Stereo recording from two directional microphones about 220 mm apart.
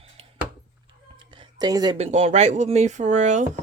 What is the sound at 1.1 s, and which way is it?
Speech, 20° right (ahead or behind).